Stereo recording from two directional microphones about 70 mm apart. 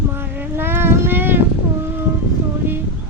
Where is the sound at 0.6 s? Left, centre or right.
Right.